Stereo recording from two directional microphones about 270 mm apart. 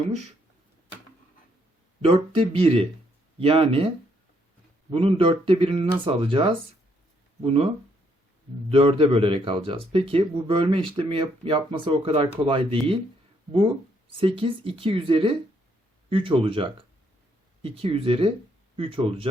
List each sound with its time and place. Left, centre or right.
2.0 s speech: right
8.7 s speech: right
14.2 s speech: centre